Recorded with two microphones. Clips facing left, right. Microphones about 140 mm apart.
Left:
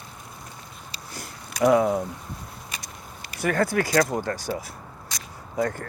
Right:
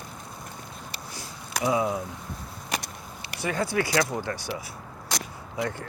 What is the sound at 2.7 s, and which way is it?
Vehicle, 75° right (ahead or behind).